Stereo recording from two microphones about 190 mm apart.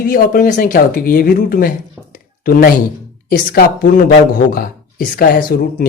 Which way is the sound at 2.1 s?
50° left (ahead or behind).